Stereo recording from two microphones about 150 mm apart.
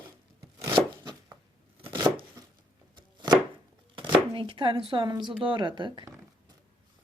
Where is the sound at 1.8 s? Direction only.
35° right (ahead or behind).